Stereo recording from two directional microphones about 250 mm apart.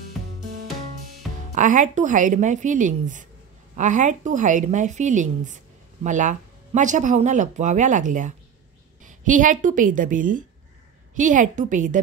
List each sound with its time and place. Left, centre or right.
1.5 s a woman's voice: right